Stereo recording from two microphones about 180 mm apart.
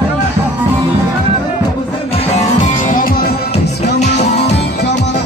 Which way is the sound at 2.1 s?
35° left (ahead or behind).